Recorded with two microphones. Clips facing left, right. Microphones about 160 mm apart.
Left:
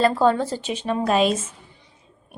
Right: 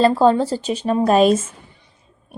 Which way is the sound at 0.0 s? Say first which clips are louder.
Right 4 dB; 30° right (ahead or behind).